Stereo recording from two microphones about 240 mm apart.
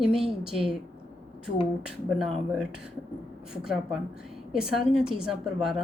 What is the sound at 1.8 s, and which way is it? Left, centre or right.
Speech, centre.